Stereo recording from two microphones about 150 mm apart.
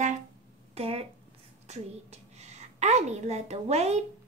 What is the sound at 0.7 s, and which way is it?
A child's voice, 40° right (ahead or behind).